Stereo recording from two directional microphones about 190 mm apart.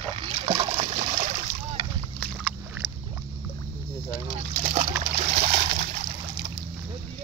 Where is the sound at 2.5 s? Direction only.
Centre (ahead or behind).